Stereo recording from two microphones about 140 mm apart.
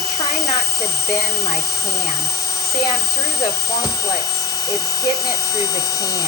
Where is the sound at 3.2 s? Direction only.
25° left (ahead or behind).